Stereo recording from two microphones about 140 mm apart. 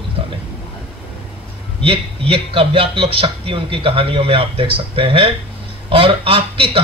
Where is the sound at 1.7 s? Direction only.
40° right (ahead or behind).